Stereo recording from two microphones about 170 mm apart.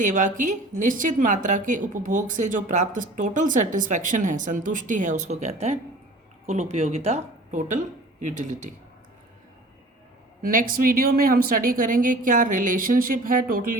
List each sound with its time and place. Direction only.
0.0 s a woman's voice: 50° right (ahead or behind)
10.4 s speech: 55° right (ahead or behind)